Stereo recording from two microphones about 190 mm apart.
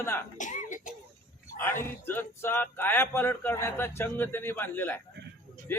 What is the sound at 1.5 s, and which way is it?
Speech, 10° left (ahead or behind).